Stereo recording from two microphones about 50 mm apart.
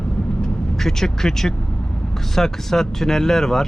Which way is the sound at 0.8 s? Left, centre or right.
Centre.